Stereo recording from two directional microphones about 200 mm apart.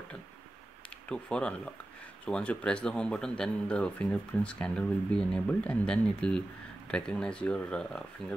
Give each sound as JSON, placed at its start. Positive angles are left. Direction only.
{"t": 1.0, "sound": "speech", "side_deg": 5}